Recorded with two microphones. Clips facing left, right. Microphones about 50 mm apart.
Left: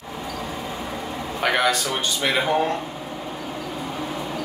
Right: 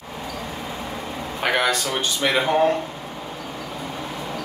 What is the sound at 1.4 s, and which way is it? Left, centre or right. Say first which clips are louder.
A man's voice: even; centre.